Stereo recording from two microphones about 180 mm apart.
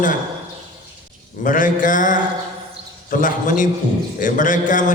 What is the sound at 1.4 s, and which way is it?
A man's voice, 45° left (ahead or behind).